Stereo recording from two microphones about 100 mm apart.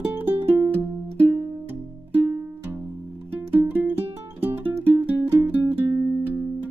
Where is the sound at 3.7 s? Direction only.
20° right (ahead or behind).